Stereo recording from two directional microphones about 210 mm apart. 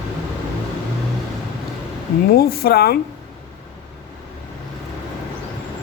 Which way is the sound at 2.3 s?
45° left (ahead or behind).